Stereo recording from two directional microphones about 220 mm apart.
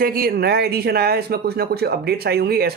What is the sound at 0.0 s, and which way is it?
Speech, 40° right (ahead or behind).